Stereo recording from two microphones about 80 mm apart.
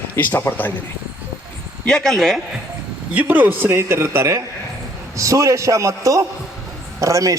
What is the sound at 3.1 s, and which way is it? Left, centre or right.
A man's voice, centre.